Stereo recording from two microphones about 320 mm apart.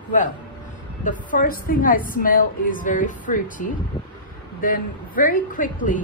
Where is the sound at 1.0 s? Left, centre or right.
Left.